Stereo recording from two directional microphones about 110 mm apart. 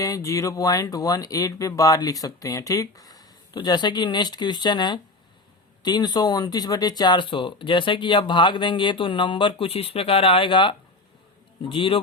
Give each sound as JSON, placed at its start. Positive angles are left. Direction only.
{"t": 0.0, "sound": "speech", "side_deg": 30}